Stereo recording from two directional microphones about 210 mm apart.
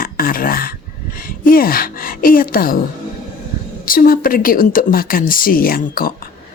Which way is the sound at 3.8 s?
40° left (ahead or behind).